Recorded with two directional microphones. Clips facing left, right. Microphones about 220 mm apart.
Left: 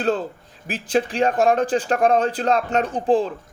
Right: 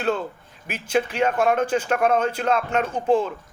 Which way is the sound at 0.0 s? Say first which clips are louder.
Left 2 dB; 35° left (ahead or behind).